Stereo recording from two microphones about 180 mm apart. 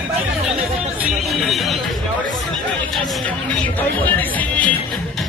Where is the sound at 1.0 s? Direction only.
Centre (ahead or behind).